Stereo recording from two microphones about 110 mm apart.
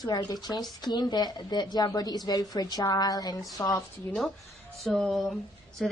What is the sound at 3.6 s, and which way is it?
Speech, 20° left (ahead or behind).